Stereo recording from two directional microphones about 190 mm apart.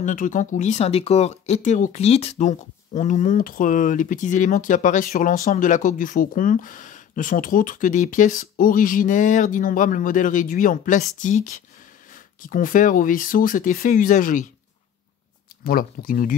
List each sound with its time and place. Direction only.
0.0 s speech: 45° left (ahead or behind)
15.6 s speech: 50° left (ahead or behind)